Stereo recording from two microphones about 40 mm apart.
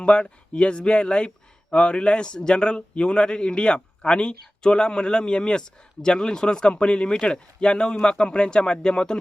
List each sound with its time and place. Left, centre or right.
0.0 s a man's voice: left